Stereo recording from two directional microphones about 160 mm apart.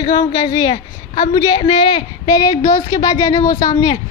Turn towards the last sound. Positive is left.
turn(degrees=25)  # may be behind; listen again after turning